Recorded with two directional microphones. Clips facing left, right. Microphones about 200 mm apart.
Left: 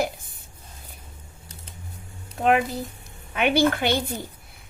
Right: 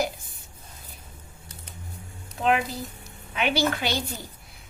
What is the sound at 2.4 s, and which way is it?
A woman's voice, 50° left (ahead or behind).